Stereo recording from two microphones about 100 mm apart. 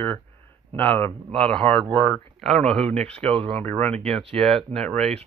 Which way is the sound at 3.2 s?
65° right (ahead or behind).